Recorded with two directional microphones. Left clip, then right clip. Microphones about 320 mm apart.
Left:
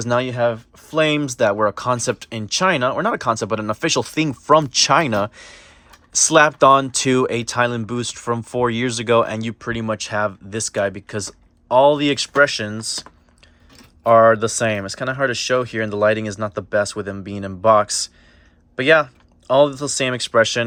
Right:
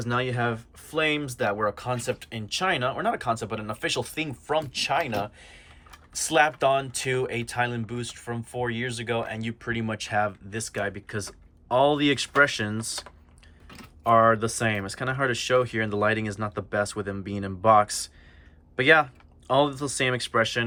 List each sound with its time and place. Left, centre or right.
0.0 s speech: centre